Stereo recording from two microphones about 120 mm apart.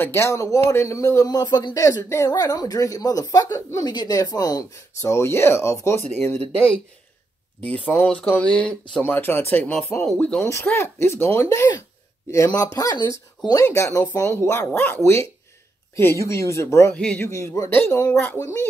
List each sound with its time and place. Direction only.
0.0 s speech: 20° left (ahead or behind)
1.9 s speech: 25° left (ahead or behind)
7.6 s speech: 10° left (ahead or behind)
10.0 s speech: 5° left (ahead or behind)
10.4 s speech: 20° left (ahead or behind)
12.7 s speech: 35° left (ahead or behind)
13.7 s speech: 25° left (ahead or behind)
16.0 s speech: 20° left (ahead or behind)
16.9 s speech: 10° left (ahead or behind)
17.3 s speech: 25° left (ahead or behind)